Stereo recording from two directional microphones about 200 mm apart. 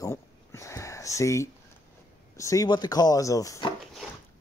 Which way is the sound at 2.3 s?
15° left (ahead or behind).